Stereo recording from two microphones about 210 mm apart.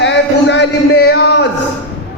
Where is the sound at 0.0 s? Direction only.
55° left (ahead or behind).